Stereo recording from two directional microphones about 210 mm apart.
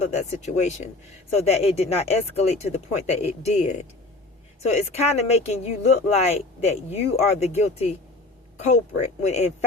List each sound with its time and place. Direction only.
0.0 s speech: 30° left (ahead or behind)